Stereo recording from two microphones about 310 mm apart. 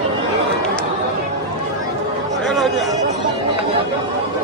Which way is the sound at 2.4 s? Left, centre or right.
Centre.